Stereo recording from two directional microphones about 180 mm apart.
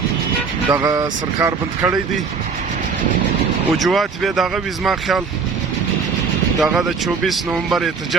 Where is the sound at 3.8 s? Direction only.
Centre (ahead or behind).